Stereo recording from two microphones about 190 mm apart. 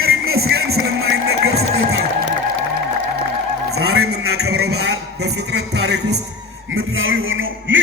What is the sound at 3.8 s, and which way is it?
A man's voice, 90° right.